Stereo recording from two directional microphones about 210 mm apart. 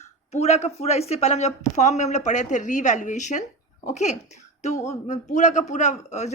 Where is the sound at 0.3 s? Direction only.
30° left (ahead or behind).